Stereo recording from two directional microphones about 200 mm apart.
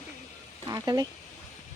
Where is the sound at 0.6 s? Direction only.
20° right (ahead or behind).